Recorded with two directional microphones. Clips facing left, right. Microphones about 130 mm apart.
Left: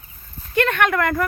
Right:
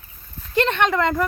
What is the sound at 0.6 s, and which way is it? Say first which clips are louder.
Speech: even; 25° right (ahead or behind).